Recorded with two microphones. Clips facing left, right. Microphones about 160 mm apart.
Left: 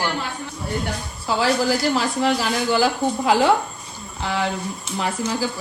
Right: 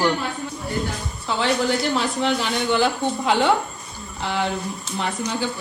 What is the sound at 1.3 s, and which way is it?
Speech, 5° left (ahead or behind).